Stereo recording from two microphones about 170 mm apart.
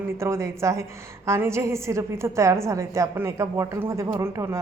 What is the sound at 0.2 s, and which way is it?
A woman's voice, 15° right (ahead or behind).